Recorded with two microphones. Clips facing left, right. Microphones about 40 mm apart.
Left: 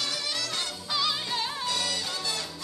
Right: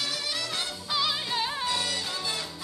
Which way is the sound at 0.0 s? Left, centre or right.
Centre.